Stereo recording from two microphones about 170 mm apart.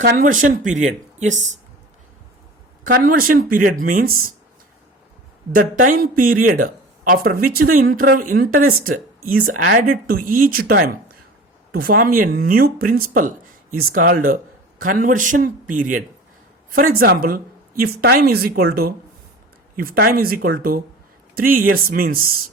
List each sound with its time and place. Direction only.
0.0 s a woman's voice: 50° right (ahead or behind)
2.8 s speech: 55° right (ahead or behind)
5.5 s a woman's voice: 55° right (ahead or behind)